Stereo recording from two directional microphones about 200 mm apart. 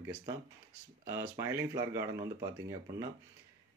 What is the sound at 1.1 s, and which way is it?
Speech, 15° right (ahead or behind).